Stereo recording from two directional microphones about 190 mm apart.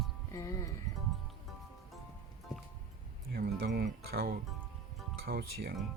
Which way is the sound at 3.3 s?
55° right (ahead or behind).